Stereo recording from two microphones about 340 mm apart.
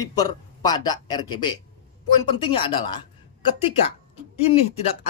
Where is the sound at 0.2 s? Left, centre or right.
Centre.